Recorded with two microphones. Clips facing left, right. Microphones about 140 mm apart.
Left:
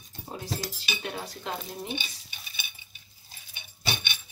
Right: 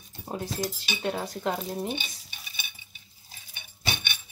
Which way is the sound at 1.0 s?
40° right (ahead or behind).